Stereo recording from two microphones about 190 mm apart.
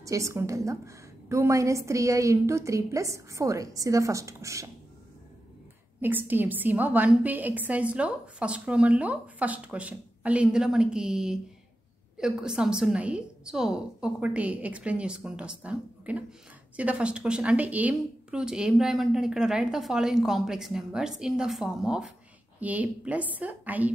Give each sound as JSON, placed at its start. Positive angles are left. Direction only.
{"t": 0.0, "sound": "a woman's voice", "side_deg": -15}
{"t": 5.9, "sound": "a woman's voice", "side_deg": -10}